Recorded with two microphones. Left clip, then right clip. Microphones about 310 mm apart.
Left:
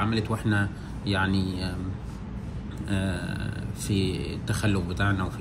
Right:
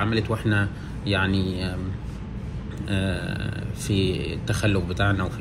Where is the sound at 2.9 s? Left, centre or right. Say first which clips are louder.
Right 3 dB; right.